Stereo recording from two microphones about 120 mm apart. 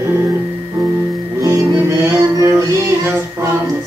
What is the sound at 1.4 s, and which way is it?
Music, 25° right (ahead or behind).